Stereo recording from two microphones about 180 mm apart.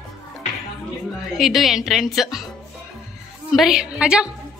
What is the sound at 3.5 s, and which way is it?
Speech, centre (ahead or behind).